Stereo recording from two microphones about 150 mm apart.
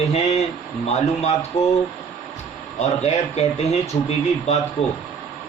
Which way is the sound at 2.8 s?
45° left (ahead or behind).